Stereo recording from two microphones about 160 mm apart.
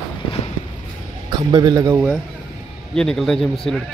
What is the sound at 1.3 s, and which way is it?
Speech, 25° right (ahead or behind).